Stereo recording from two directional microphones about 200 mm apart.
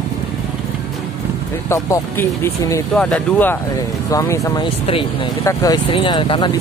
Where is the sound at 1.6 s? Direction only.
15° left (ahead or behind).